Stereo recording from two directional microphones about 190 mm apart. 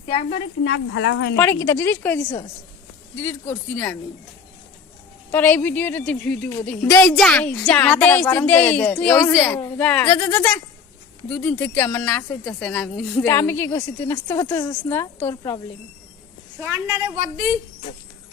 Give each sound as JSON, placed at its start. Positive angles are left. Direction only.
{"t": 0.1, "sound": "speech", "side_deg": 35}
{"t": 0.6, "sound": "speech", "side_deg": 70}
{"t": 1.4, "sound": "a woman's voice", "side_deg": 15}
{"t": 5.3, "sound": "a woman's voice", "side_deg": 10}
{"t": 13.2, "sound": "a woman's voice", "side_deg": 15}
{"t": 16.6, "sound": "a woman's voice", "side_deg": -10}